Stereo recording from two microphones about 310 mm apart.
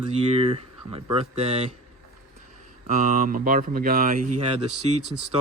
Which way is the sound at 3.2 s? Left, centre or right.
Right.